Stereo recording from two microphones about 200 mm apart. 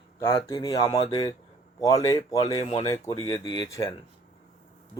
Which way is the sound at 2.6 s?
30° left (ahead or behind).